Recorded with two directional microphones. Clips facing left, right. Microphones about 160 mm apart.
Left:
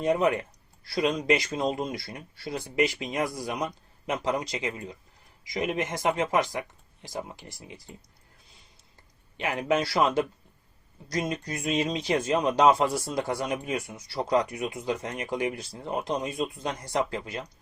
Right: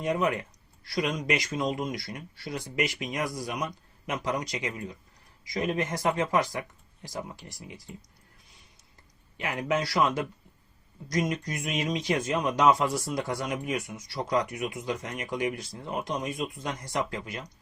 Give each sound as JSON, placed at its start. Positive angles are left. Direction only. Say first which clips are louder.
{"t": 0.0, "sound": "speech", "louder": "left 3 dB", "side_deg": 30}
{"t": 9.4, "sound": "speech", "louder": "left 3 dB", "side_deg": 25}